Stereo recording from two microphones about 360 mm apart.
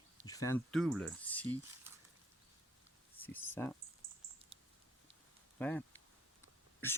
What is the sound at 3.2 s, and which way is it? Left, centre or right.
Speech, centre.